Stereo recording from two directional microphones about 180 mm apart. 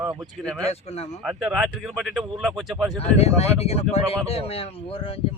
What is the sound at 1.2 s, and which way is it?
Speech, 5° right (ahead or behind).